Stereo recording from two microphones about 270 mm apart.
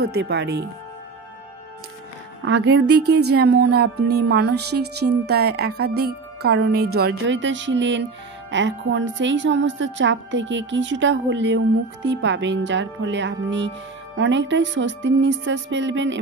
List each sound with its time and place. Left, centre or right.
0.0 s music: right
2.4 s music: right
14.1 s speech: right